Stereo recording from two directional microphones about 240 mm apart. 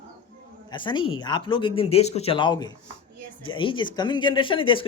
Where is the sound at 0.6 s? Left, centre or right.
Centre.